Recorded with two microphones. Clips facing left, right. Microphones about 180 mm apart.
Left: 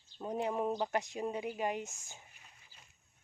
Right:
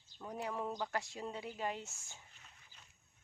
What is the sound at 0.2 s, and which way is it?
Speech, 20° left (ahead or behind).